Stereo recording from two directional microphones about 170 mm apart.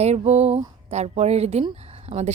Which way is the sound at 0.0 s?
40° right (ahead or behind).